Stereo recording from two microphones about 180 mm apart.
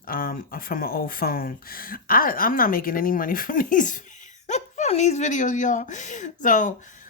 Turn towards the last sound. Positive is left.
turn(degrees=45)  # may be behind; listen again after turning